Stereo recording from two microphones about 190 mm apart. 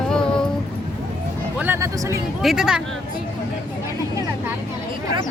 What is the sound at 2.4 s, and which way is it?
Speech, 5° right (ahead or behind).